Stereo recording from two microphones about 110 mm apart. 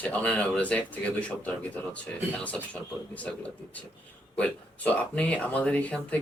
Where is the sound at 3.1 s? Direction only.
10° left (ahead or behind).